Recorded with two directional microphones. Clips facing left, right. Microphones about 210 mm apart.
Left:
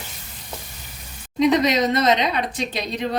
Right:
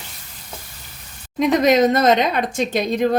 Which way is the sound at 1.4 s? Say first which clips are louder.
Right 3 dB; 50° right (ahead or behind).